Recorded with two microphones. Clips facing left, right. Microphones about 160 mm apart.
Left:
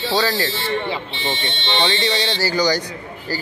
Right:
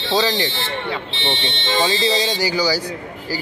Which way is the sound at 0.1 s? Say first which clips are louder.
Right 2 dB; 20° right (ahead or behind).